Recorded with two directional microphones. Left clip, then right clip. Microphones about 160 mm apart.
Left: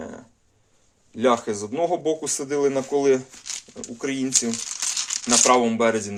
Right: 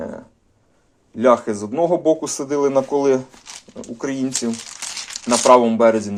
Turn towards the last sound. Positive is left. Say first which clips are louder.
# right 6 dB
turn(degrees=-15)  # may be behind; listen again after turning